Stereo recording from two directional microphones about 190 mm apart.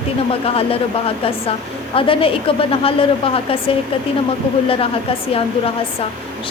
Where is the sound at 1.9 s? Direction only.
30° left (ahead or behind).